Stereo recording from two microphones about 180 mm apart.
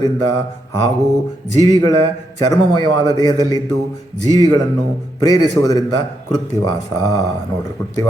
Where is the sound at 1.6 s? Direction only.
20° left (ahead or behind).